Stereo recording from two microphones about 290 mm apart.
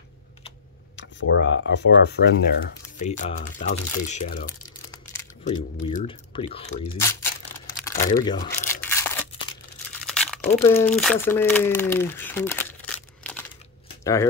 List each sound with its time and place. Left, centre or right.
0.9 s speech: left
3.0 s speech: left
8.2 s speech: centre
8.6 s scissors: centre
10.0 s crumpling: centre
10.5 s speech: centre